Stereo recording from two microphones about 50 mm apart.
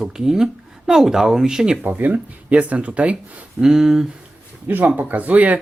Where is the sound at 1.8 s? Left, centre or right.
Right.